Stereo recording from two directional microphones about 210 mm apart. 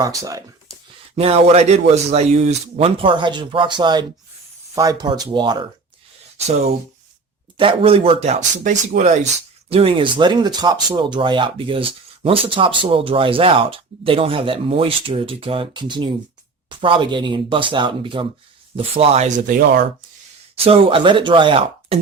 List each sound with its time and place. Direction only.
0.0 s speech: 15° right (ahead or behind)
1.1 s speech: 30° right (ahead or behind)
7.5 s speech: 25° right (ahead or behind); by 19.9 s 50° right (ahead or behind)
20.7 s speech: 25° right (ahead or behind)